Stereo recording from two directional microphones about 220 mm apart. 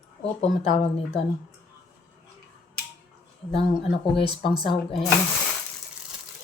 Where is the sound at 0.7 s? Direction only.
30° left (ahead or behind).